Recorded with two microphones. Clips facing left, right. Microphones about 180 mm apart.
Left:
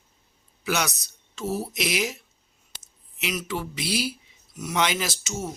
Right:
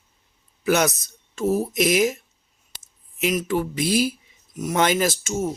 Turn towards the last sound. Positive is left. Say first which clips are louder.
# right 8 dB
turn(degrees=-50)  # may be behind; listen again after turning